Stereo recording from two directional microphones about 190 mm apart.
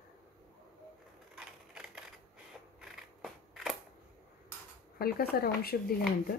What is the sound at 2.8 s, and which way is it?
Scissors, centre (ahead or behind).